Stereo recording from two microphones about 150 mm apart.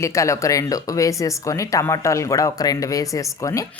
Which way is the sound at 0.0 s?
20° left (ahead or behind).